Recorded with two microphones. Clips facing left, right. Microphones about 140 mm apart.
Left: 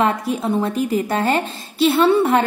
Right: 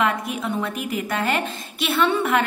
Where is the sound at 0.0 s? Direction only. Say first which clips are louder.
Left 4 dB; 30° left (ahead or behind).